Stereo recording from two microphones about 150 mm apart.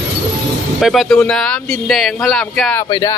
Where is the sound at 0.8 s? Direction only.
Centre (ahead or behind).